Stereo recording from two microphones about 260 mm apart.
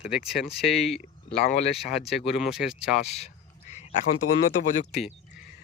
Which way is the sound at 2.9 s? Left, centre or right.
Left.